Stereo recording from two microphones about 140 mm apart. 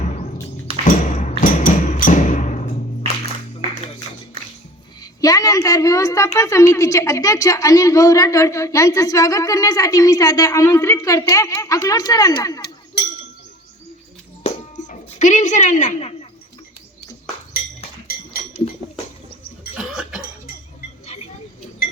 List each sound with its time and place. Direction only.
0.9 s music: 65° left (ahead or behind)
4.9 s a woman's voice: 25° left (ahead or behind)
14.4 s music: 45° left (ahead or behind)
14.8 s a woman's voice: 65° left (ahead or behind)
18.8 s a sound: 40° right (ahead or behind)
19.7 s cough: 5° right (ahead or behind)